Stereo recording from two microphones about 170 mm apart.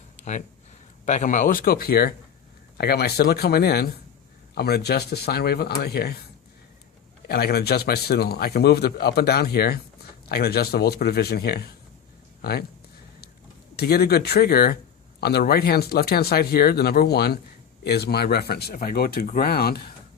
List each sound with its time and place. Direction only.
1.0 s a man's voice: 45° left (ahead or behind); by 6.1 s 70° left (ahead or behind)
7.3 s a man's voice: 65° left (ahead or behind)
13.7 s a man's voice: 70° left (ahead or behind)